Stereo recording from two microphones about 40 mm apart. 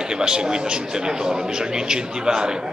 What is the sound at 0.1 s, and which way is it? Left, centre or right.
A man's voice, centre.